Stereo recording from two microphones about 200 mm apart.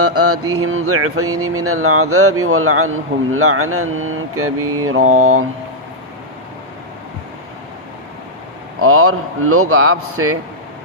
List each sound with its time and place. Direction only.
0.0 s a man's voice: 90° right
8.8 s a man's voice: 90° right